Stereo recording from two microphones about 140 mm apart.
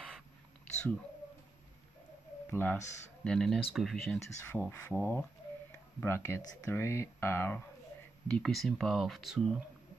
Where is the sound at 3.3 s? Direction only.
Centre (ahead or behind).